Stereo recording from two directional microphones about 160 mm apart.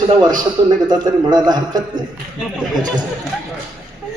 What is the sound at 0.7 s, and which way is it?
A man's voice, 25° right (ahead or behind).